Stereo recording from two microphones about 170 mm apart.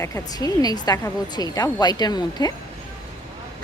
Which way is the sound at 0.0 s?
20° left (ahead or behind).